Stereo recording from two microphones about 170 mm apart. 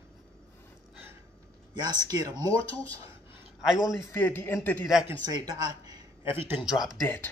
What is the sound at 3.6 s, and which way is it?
Speech, centre (ahead or behind).